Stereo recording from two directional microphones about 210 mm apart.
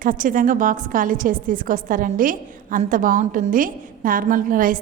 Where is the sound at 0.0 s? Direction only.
40° right (ahead or behind).